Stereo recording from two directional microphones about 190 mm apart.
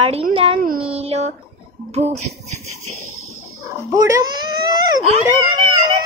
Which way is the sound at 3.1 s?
90° right.